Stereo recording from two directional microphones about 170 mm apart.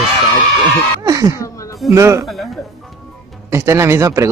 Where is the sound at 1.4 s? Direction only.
20° left (ahead or behind).